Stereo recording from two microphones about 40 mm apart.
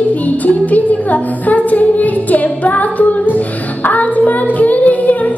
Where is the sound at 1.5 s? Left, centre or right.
Left.